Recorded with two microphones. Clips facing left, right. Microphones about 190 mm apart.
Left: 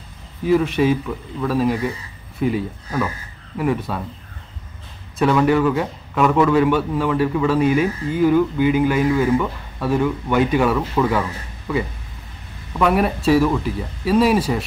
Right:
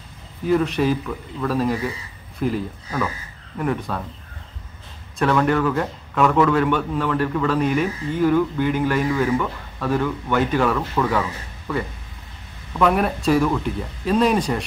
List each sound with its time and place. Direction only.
0.5 s speech: centre (ahead or behind)
5.2 s a man's voice: 5° left (ahead or behind)